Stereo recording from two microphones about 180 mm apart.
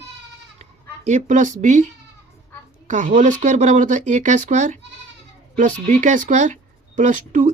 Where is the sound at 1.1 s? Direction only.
40° right (ahead or behind).